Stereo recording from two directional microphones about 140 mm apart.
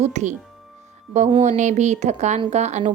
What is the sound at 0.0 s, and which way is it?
Speech, 55° right (ahead or behind).